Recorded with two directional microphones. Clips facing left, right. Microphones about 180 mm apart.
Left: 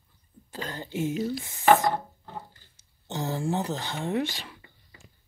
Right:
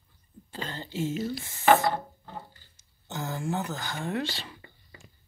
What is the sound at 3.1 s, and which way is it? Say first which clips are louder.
Speech: left 3 dB; 30° left (ahead or behind).